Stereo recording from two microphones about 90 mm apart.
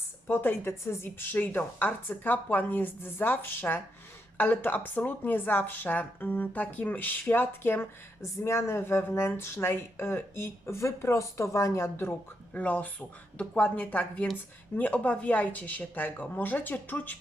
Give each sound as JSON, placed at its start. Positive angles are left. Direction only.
{"t": 0.3, "sound": "speech", "side_deg": 25}
{"t": 12.5, "sound": "speech", "side_deg": 15}